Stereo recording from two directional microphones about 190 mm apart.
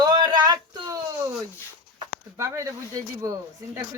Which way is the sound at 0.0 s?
20° right (ahead or behind).